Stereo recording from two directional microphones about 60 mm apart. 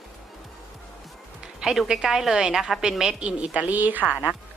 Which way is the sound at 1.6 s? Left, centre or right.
Centre.